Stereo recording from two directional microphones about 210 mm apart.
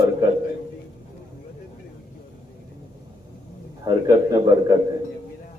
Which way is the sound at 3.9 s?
20° right (ahead or behind).